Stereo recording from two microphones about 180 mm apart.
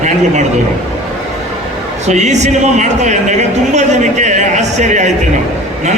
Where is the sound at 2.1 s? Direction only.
40° right (ahead or behind).